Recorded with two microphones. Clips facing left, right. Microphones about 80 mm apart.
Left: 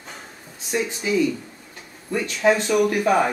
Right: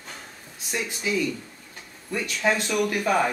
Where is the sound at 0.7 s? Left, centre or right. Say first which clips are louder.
Left 5 dB; centre.